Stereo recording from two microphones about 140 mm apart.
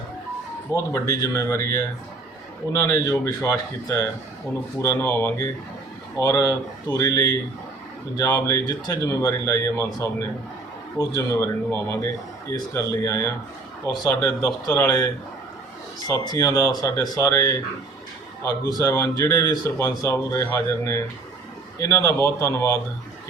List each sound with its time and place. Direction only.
1.0 s speech: 25° left (ahead or behind)